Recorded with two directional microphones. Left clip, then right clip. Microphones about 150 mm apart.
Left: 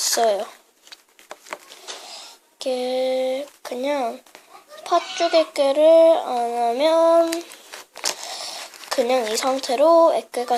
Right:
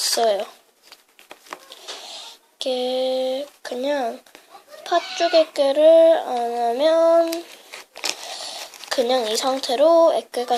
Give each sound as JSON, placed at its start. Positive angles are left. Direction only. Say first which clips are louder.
{"t": 0.0, "sound": "speech", "louder": "even", "side_deg": 10}
{"t": 1.5, "sound": "a sound", "louder": "even", "side_deg": 0}
{"t": 4.8, "sound": "speech", "louder": "even", "side_deg": 5}
{"t": 7.9, "sound": "crumpling", "louder": "even", "side_deg": 5}